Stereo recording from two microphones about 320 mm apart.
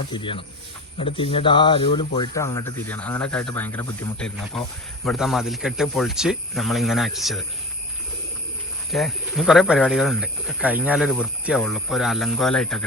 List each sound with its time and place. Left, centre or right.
0.1 s speech: centre
8.9 s speech: centre